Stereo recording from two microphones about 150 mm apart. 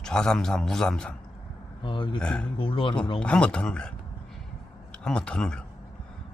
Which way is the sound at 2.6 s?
35° left (ahead or behind).